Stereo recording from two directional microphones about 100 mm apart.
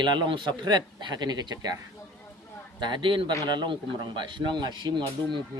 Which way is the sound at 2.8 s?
50° right (ahead or behind).